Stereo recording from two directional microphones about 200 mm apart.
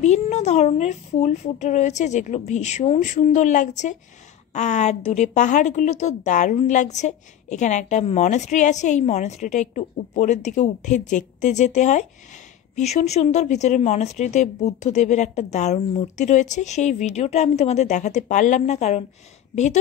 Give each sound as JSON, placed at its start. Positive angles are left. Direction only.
{"t": 0.0, "sound": "a woman's voice", "side_deg": 35}